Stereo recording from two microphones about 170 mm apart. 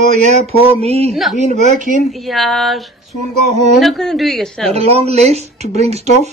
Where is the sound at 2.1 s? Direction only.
Centre (ahead or behind).